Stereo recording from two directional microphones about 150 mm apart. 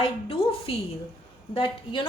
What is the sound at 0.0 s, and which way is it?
A woman's voice, 35° left (ahead or behind).